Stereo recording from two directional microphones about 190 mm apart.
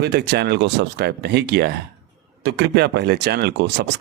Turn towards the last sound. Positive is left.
turn(degrees=-60)  # may be behind; listen again after turning